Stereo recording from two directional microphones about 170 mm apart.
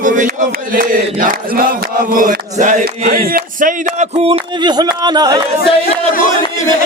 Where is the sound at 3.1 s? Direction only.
60° right (ahead or behind); by 5.4 s 25° right (ahead or behind).